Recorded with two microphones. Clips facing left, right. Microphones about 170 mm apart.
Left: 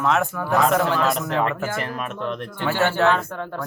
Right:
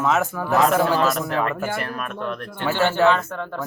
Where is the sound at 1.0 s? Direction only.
20° left (ahead or behind).